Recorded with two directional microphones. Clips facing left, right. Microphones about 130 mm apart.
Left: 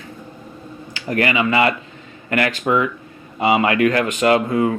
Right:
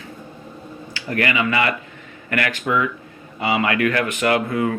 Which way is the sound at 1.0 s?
25° left (ahead or behind).